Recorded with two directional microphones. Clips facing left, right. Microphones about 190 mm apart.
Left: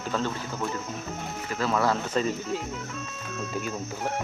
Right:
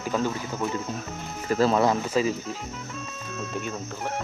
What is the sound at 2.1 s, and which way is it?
Speech, 5° right (ahead or behind).